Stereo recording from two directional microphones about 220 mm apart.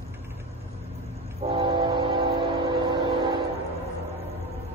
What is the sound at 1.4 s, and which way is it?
Train, 20° right (ahead or behind).